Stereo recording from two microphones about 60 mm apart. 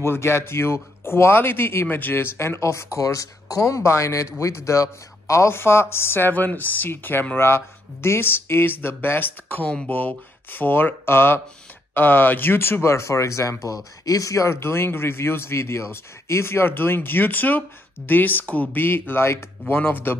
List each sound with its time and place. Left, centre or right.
0.0 s speech: left
14.5 s speech: left